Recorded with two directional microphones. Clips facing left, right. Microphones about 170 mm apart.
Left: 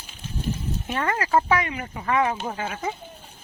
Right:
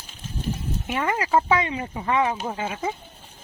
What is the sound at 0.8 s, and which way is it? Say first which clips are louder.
Speech: right 1 dB; 10° right (ahead or behind).